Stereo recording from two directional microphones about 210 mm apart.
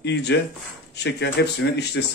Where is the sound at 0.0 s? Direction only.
55° left (ahead or behind).